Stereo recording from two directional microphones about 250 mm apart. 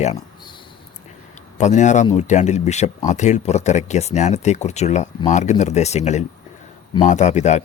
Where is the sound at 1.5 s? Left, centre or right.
Left.